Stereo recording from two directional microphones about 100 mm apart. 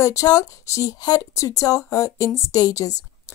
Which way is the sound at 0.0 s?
35° left (ahead or behind).